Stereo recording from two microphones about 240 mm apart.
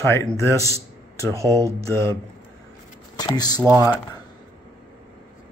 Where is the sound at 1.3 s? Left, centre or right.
Centre.